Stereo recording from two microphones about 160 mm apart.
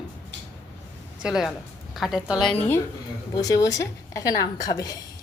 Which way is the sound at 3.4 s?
20° left (ahead or behind).